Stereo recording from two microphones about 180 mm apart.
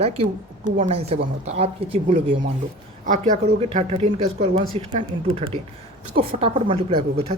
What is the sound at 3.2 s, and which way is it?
A woman's voice, 40° right (ahead or behind).